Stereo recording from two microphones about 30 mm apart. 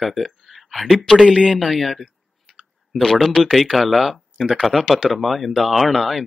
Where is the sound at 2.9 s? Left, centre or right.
Centre.